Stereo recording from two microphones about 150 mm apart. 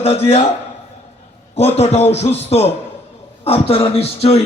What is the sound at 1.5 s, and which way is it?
A man's voice, 45° left (ahead or behind).